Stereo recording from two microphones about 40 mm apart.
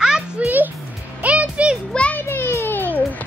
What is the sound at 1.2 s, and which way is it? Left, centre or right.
Music, right.